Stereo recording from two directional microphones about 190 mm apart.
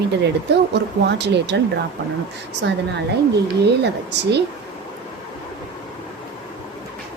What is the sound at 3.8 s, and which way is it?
Speech, 60° right (ahead or behind).